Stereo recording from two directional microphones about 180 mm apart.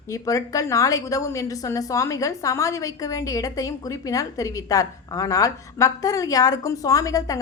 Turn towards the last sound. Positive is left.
turn(degrees=20)  # may be behind; listen again after turning